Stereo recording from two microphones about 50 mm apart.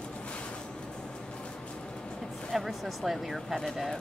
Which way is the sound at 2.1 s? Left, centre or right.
Centre.